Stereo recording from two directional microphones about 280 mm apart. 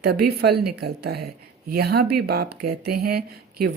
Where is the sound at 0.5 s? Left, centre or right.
Right.